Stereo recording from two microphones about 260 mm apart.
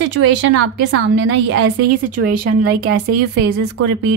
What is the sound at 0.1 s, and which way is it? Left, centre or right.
A woman's voice, right.